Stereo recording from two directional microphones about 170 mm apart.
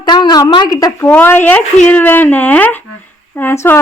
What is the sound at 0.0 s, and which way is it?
A woman's voice, 25° left (ahead or behind).